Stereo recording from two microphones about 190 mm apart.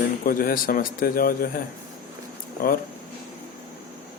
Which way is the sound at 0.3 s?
50° left (ahead or behind).